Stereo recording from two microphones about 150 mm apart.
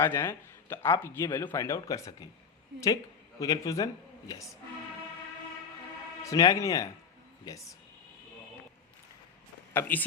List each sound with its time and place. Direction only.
0.0 s speech: 15° left (ahead or behind)
3.4 s speech: 25° left (ahead or behind)
6.2 s speech: 25° left (ahead or behind)
9.7 s speech: 10° left (ahead or behind)